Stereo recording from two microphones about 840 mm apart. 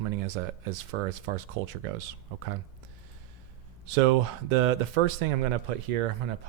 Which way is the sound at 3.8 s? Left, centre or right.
Right.